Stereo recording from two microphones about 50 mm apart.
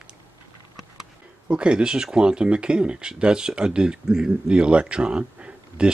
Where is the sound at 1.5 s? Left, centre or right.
Centre.